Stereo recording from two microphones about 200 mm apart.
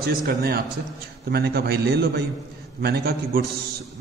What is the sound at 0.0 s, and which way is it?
A man's voice, 50° right (ahead or behind).